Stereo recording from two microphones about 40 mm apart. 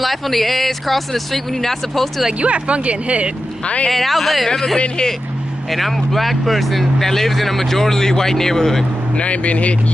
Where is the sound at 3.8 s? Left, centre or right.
Centre.